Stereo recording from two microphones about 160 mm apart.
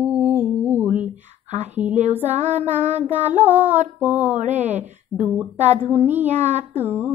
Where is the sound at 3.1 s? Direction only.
10° right (ahead or behind).